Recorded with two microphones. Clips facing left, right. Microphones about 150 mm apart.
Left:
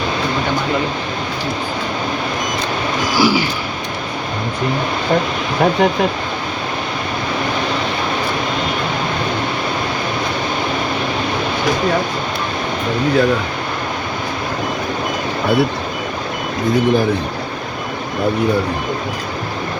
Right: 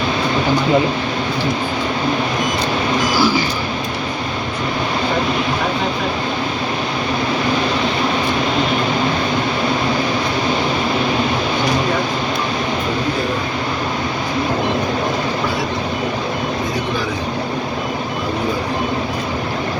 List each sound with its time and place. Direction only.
3.2 s vehicle: 10° left (ahead or behind)